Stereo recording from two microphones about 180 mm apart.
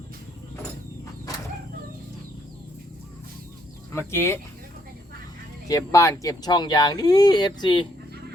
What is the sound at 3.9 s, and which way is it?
Speech, 15° left (ahead or behind).